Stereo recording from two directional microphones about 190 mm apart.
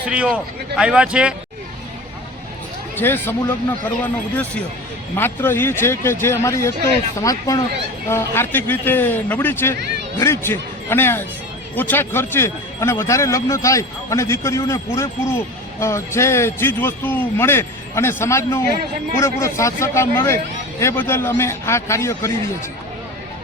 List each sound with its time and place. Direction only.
0.0 s speech: 5° right (ahead or behind)
2.9 s speech: 10° left (ahead or behind)